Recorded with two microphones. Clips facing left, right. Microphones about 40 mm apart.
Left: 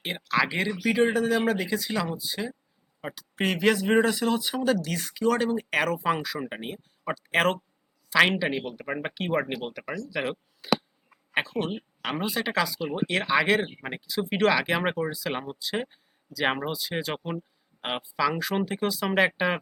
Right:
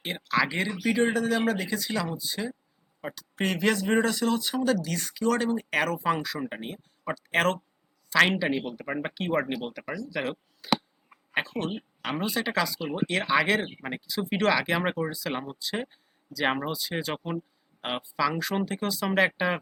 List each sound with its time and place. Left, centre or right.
0.0 s speech: centre